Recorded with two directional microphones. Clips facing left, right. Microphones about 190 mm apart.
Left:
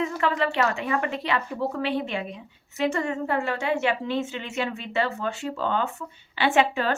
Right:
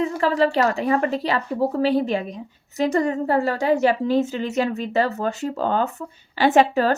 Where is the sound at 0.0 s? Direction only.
35° right (ahead or behind).